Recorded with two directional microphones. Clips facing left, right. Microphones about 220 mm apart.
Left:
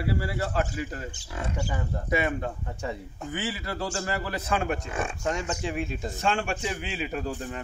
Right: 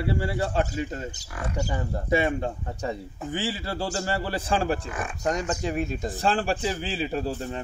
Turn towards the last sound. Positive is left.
turn(degrees=-30)  # may be behind; listen again after turning